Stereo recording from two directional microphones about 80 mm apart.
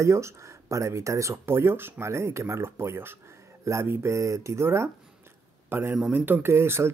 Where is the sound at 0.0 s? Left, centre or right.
Right.